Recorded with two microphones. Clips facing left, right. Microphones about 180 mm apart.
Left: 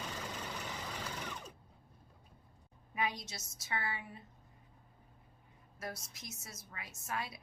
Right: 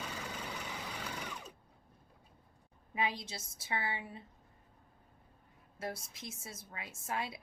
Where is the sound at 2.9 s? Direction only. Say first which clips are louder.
Right 2 dB; 25° right (ahead or behind).